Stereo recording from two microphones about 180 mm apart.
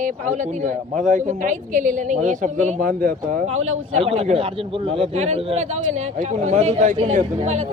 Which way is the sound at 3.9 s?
35° right (ahead or behind).